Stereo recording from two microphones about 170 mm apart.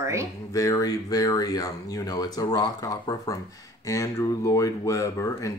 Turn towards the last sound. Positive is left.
turn(degrees=20)  # may be behind; listen again after turning